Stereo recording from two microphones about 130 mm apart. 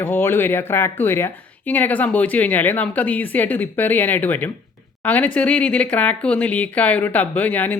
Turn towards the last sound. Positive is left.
turn(degrees=15)  # may be behind; listen again after turning